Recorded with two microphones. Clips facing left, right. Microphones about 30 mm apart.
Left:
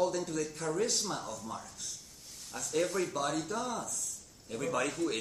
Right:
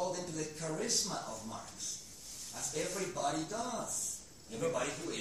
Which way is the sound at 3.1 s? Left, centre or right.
Left.